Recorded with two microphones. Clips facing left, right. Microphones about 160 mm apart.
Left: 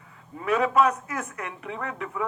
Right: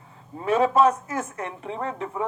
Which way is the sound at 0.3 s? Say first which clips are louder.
Right 2 dB; 30° right (ahead or behind).